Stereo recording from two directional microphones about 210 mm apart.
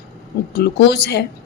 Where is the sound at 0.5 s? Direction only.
50° left (ahead or behind).